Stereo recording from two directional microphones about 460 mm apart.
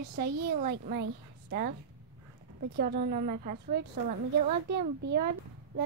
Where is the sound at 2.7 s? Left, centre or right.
Right.